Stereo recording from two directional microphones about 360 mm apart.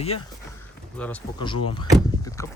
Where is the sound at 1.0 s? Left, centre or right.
Centre.